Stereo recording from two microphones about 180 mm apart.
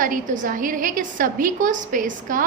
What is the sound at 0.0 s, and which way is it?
A woman's voice, 50° right (ahead or behind).